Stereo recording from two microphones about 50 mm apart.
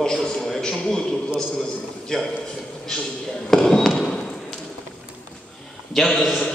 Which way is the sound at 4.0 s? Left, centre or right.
Centre.